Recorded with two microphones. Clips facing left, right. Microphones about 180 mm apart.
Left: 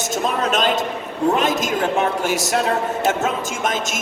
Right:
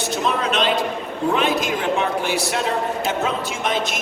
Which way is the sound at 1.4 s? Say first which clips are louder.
Left 1 dB; 40° left (ahead or behind).